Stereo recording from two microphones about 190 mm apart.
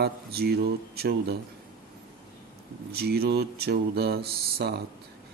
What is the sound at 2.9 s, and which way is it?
Speech, 55° right (ahead or behind).